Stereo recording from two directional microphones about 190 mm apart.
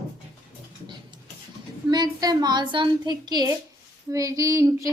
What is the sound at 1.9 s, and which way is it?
A woman's voice, 20° right (ahead or behind).